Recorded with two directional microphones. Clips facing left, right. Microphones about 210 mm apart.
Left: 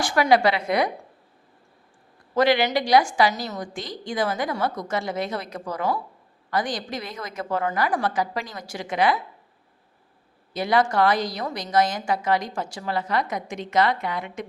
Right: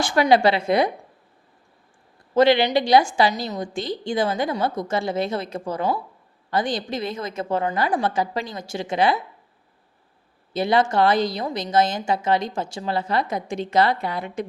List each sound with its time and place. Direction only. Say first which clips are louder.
0.0 s a woman's voice: right 2 dB; 25° right (ahead or behind)
2.3 s a woman's voice: right 3 dB; 25° right (ahead or behind)
10.5 s a woman's voice: right 2 dB; 25° right (ahead or behind)